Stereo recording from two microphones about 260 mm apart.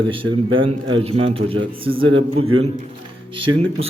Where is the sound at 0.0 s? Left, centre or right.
Centre.